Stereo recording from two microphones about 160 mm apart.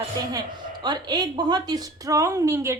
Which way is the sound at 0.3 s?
25° right (ahead or behind).